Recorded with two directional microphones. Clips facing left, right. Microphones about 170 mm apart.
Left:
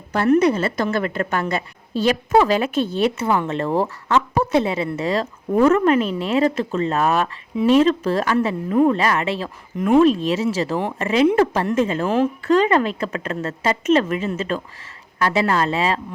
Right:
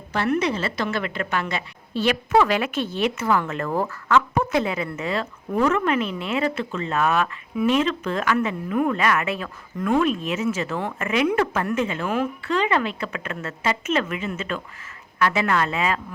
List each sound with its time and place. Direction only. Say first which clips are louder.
0.1 s a woman's voice: left 7 dB; 45° left (ahead or behind); by 10.0 s 20° left (ahead or behind)
10.0 s a woman's voice: left 7 dB; 30° left (ahead or behind)